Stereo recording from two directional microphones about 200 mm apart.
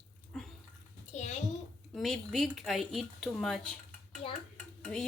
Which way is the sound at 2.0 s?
Centre (ahead or behind).